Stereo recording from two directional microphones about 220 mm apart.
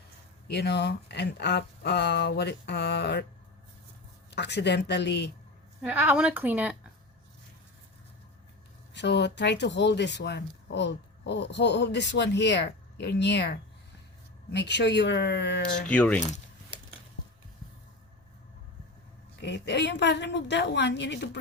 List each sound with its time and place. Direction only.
0.5 s speech: 50° left (ahead or behind)
4.3 s speech: 50° left (ahead or behind)
5.8 s speech: 5° right (ahead or behind)
8.9 s speech: 50° left (ahead or behind)
15.9 s speech: 5° left (ahead or behind)
19.4 s speech: 50° left (ahead or behind)